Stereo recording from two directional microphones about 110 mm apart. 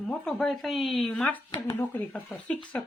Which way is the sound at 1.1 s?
10° left (ahead or behind).